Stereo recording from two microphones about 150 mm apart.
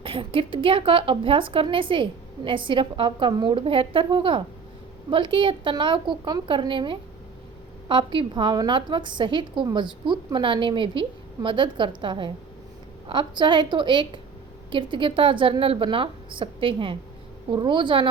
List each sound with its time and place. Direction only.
0.0 s a woman's voice: 35° right (ahead or behind)